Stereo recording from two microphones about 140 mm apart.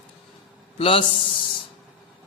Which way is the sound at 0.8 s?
40° left (ahead or behind).